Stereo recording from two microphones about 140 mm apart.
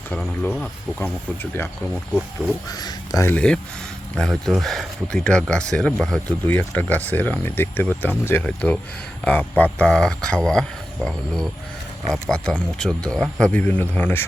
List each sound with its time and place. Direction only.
0.9 s speech: 15° left (ahead or behind)
2.7 s speech: 25° left (ahead or behind)
3.3 s speech: 10° left (ahead or behind)